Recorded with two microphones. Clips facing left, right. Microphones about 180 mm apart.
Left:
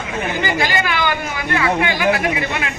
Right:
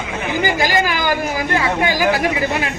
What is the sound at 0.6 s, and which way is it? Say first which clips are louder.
Speech: right 2 dB; 40° right (ahead or behind).